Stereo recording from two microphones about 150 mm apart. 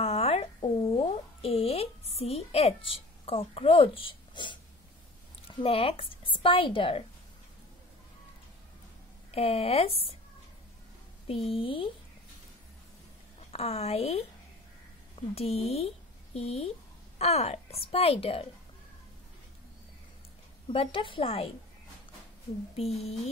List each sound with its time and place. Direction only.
0.0 s a sound: 45° left (ahead or behind)
5.5 s a woman's voice: 35° left (ahead or behind)
9.3 s a woman's voice: 40° left (ahead or behind)
11.2 s a woman's voice: 40° left (ahead or behind)
13.4 s a woman's voice: 45° left (ahead or behind)
20.7 s a woman's voice: 35° left (ahead or behind)
22.8 s speech: 40° left (ahead or behind)